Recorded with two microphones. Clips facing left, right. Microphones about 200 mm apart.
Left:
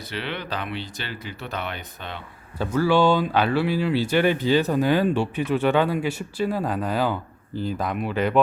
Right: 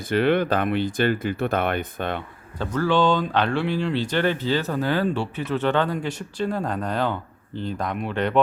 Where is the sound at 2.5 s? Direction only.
10° left (ahead or behind).